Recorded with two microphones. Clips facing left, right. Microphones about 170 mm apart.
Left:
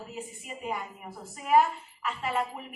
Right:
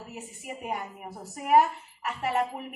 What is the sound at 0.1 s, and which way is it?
A woman's voice, 65° right (ahead or behind).